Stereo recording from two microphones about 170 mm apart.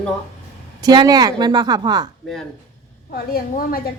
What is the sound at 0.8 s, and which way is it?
A woman's voice, 25° right (ahead or behind).